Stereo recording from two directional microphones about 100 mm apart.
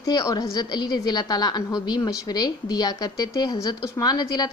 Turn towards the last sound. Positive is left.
turn(degrees=40)  # may be behind; listen again after turning